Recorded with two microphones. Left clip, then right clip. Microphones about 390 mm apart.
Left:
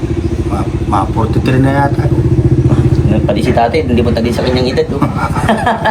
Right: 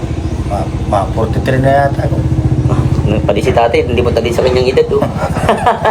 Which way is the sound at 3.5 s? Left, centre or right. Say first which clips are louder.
Even; centre.